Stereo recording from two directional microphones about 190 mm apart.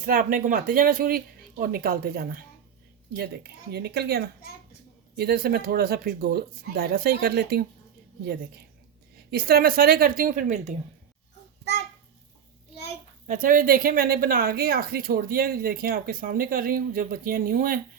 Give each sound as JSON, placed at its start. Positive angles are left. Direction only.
{"t": 0.0, "sound": "speech", "side_deg": -50}
{"t": 9.3, "sound": "speech", "side_deg": -50}
{"t": 13.2, "sound": "speech", "side_deg": -45}